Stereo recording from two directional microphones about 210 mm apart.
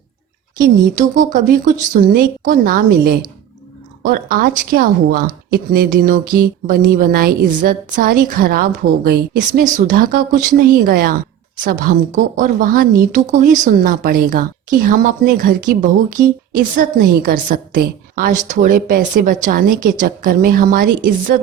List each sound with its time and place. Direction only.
0.6 s a woman's voice: 40° right (ahead or behind)